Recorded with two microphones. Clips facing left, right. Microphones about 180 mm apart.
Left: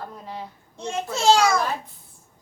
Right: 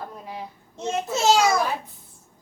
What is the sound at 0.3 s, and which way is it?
A child's voice, 15° right (ahead or behind).